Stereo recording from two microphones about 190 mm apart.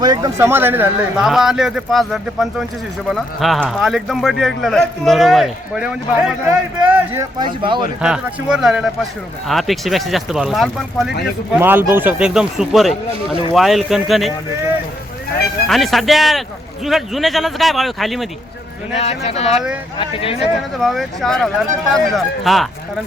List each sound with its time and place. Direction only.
0.0 s speech: 20° right (ahead or behind)
7.3 s speech: 25° right (ahead or behind)
8.0 s speech: 5° right (ahead or behind)
11.5 s speech: 10° right (ahead or behind)
15.6 s speech: centre (ahead or behind)
18.9 s speech: 35° left (ahead or behind)
20.7 s speech: centre (ahead or behind)